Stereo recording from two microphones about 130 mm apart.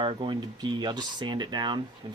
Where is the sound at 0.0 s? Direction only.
40° right (ahead or behind).